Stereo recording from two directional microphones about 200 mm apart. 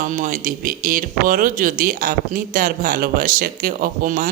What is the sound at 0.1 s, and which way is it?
A woman's voice, 40° right (ahead or behind).